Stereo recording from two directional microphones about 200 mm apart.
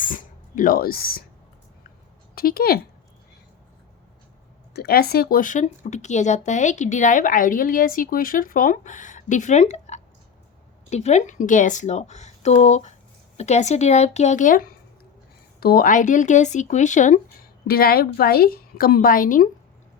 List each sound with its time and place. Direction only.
0.0 s speech: 40° left (ahead or behind)
2.3 s speech: 50° left (ahead or behind)
4.7 s speech: 50° left (ahead or behind)
17.7 s a woman's voice: 50° left (ahead or behind)